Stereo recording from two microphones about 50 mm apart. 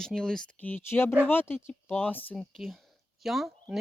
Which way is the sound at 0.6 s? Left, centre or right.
Left.